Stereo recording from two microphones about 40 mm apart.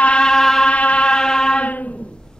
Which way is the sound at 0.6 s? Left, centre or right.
Left.